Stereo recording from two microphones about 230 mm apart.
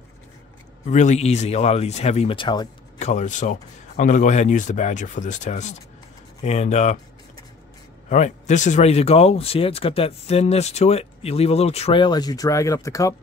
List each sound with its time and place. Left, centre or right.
0.8 s speech: left
3.0 s speech: left
8.1 s speech: left; by 13.1 s centre